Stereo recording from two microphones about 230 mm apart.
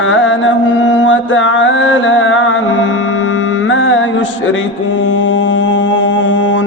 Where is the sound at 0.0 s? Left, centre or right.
Left.